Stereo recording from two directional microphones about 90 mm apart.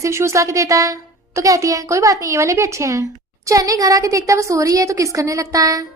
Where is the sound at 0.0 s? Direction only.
30° right (ahead or behind).